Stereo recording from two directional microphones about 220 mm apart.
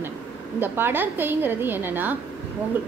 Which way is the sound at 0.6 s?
10° right (ahead or behind).